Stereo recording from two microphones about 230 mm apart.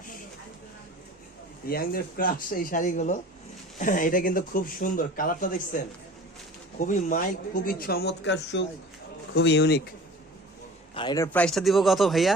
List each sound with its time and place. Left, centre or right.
1.6 s speech: left
10.9 s speech: centre